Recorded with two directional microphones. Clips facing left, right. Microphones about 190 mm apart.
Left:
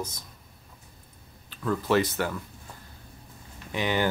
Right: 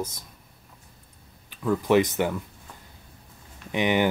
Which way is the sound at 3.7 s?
20° right (ahead or behind).